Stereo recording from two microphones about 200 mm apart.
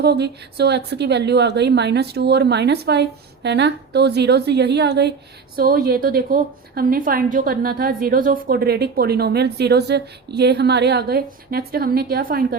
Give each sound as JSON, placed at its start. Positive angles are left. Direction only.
{"t": 0.0, "sound": "a woman's voice", "side_deg": -55}